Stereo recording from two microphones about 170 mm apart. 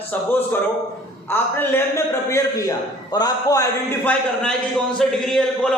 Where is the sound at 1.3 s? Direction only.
15° left (ahead or behind).